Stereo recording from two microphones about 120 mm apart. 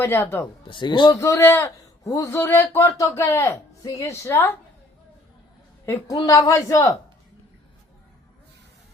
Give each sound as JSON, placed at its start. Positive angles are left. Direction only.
{"t": 0.0, "sound": "speech", "side_deg": 20}
{"t": 0.7, "sound": "a man's voice", "side_deg": 40}
{"t": 1.2, "sound": "a man's voice", "side_deg": 20}
{"t": 5.8, "sound": "a woman's voice", "side_deg": 20}